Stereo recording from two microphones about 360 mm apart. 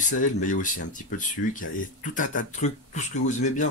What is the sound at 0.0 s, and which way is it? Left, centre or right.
Speech, left.